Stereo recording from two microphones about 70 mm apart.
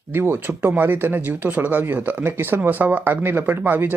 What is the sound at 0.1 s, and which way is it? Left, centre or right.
Speech, right.